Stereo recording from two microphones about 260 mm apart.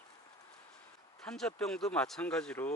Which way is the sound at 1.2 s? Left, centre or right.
Centre.